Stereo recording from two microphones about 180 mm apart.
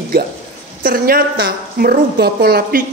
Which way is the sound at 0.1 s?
55° right (ahead or behind).